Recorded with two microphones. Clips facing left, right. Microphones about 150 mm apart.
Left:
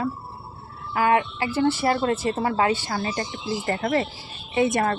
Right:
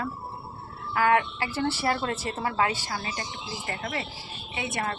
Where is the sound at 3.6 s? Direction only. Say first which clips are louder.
Left 10 dB; 40° left (ahead or behind).